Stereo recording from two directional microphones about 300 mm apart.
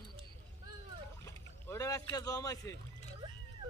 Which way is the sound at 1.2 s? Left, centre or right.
Centre.